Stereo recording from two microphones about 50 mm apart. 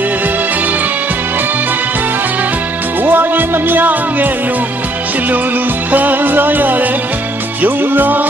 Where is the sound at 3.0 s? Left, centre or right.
Right.